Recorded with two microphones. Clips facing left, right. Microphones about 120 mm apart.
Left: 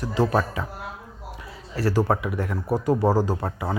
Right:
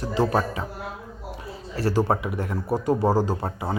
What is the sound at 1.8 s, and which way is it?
Speech, 25° right (ahead or behind).